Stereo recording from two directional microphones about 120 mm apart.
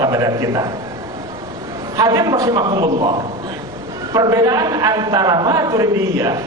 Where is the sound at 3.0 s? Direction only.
50° right (ahead or behind).